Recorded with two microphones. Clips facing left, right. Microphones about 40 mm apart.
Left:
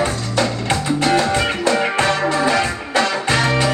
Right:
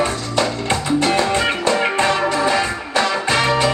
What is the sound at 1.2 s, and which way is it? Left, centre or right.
Music, right.